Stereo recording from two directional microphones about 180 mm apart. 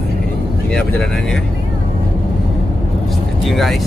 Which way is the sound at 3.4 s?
Centre (ahead or behind).